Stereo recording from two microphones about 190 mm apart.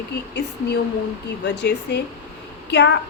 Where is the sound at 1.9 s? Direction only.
65° left (ahead or behind).